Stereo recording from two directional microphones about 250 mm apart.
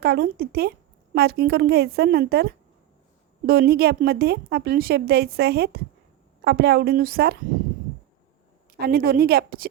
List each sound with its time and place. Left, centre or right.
0.0 s a woman's voice: right
8.8 s a woman's voice: right